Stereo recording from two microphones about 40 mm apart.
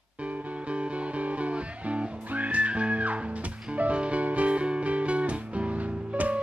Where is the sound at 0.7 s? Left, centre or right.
Right.